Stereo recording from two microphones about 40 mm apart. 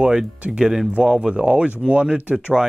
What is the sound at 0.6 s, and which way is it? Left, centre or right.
Speech, centre.